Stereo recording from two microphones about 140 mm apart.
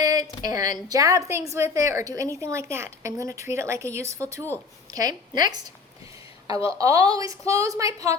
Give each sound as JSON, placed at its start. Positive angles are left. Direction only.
{"t": 0.0, "sound": "a sound", "side_deg": -25}
{"t": 0.4, "sound": "a woman's voice", "side_deg": -25}
{"t": 6.7, "sound": "a woman's voice", "side_deg": -25}